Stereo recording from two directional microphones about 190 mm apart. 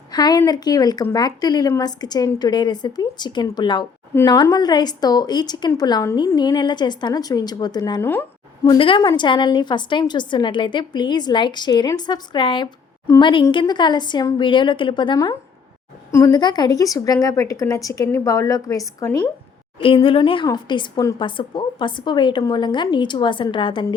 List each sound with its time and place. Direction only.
0.1 s a woman's voice: 20° left (ahead or behind)
8.1 s a sound: 10° left (ahead or behind)
8.7 s a woman's voice: 25° left (ahead or behind)